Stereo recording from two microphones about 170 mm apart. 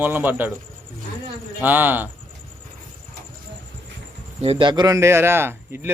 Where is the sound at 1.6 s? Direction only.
10° right (ahead or behind).